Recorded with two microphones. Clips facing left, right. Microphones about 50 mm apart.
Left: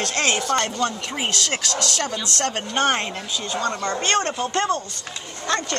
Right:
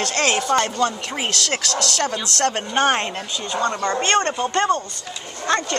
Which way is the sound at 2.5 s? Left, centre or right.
Centre.